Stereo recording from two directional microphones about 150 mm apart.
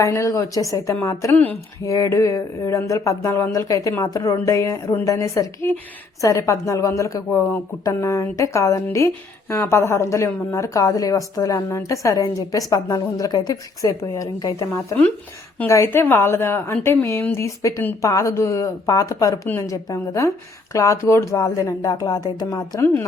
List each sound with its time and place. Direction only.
0.0 s a woman's voice: 20° left (ahead or behind)